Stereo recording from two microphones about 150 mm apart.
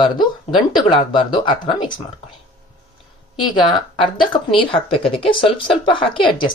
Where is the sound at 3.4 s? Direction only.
30° left (ahead or behind).